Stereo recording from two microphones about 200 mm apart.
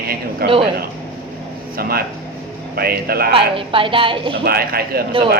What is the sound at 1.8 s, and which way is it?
A man's voice, 50° right (ahead or behind).